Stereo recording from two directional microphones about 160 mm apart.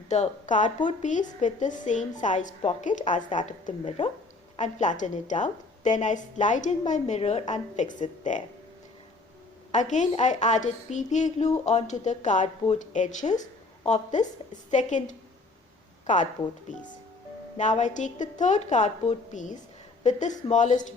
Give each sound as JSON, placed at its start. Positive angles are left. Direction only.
{"t": 0.1, "sound": "a woman's voice", "side_deg": 50}
{"t": 9.7, "sound": "a woman's voice", "side_deg": 50}
{"t": 17.6, "sound": "a woman's voice", "side_deg": 50}